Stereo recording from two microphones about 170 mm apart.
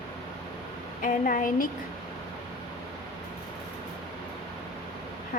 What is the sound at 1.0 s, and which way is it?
Speech, 50° left (ahead or behind).